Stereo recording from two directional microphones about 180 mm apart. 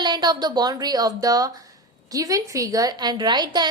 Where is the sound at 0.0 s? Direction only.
25° right (ahead or behind).